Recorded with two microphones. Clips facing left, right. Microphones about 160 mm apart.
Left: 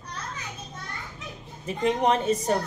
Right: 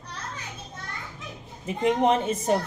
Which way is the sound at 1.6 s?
20° right (ahead or behind).